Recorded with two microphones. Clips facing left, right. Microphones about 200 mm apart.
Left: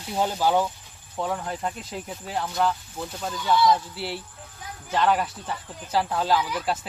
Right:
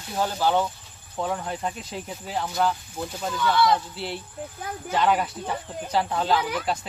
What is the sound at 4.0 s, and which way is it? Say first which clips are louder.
Speech: right 1 dB; 5° left (ahead or behind).